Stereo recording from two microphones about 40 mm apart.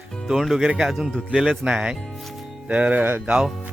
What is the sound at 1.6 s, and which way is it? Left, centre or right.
Speech, right.